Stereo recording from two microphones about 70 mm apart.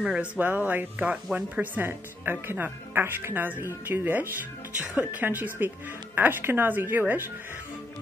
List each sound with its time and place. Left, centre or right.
0.0 s speech: centre
0.4 s speech: right